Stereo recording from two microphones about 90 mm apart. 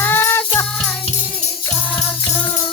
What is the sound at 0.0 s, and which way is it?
Music, 25° left (ahead or behind).